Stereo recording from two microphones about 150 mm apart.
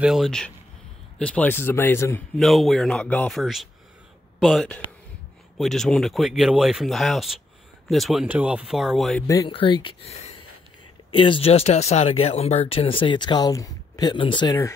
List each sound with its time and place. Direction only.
0.0 s speech: centre (ahead or behind); by 2.2 s 15° left (ahead or behind)
2.3 s speech: centre (ahead or behind)
9.5 s speech: 35° left (ahead or behind)